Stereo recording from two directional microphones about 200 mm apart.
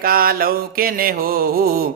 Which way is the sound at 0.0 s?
45° right (ahead or behind).